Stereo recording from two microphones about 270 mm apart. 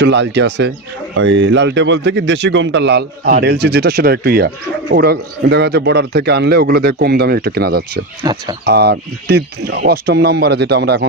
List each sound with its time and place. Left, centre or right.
0.0 s speech: right
8.2 s speech: centre
8.6 s speech: right